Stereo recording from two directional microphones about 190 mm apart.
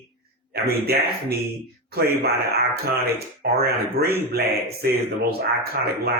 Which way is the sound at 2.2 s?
55° right (ahead or behind).